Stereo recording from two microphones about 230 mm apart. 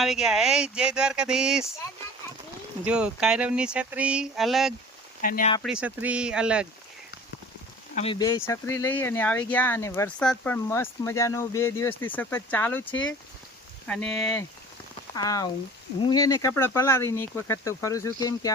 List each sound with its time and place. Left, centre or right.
0.0 s speech: centre
2.8 s speech: centre
5.2 s speech: left
5.6 s speech: centre
7.9 s speech: left; by 14.4 s centre
15.1 s speech: centre